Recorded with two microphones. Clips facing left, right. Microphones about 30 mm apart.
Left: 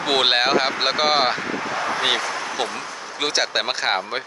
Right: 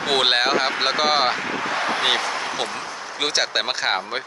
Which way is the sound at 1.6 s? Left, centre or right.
Right.